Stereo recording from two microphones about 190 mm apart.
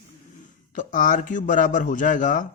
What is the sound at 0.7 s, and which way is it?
Speech, 45° left (ahead or behind).